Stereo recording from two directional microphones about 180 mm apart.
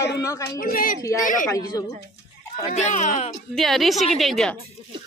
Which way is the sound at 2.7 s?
40° left (ahead or behind).